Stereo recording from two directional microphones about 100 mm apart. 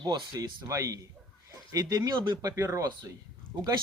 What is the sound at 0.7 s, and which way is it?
Speech, 35° right (ahead or behind).